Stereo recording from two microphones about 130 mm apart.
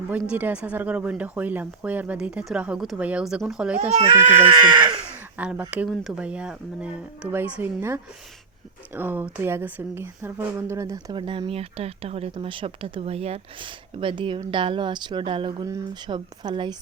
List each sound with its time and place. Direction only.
0.1 s speech: 10° right (ahead or behind)
3.8 s speech: 55° right (ahead or behind)
4.5 s speech: 35° right (ahead or behind)
5.4 s speech: 10° right (ahead or behind); by 16.7 s 35° right (ahead or behind)